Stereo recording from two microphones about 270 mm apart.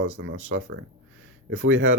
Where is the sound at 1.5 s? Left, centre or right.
Right.